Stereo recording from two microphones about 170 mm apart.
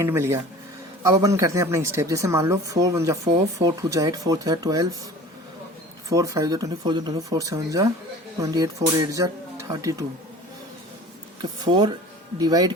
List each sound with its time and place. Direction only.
0.0 s speech: 15° right (ahead or behind)
6.1 s speech: 20° right (ahead or behind)
11.6 s speech: 25° right (ahead or behind)